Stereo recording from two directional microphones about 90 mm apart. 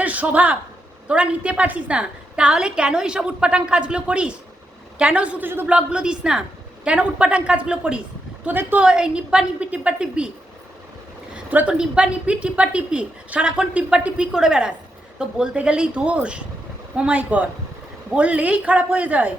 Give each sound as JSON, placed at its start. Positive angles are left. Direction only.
{"t": 0.0, "sound": "a woman's voice", "side_deg": -15}
{"t": 11.5, "sound": "a woman's voice", "side_deg": -10}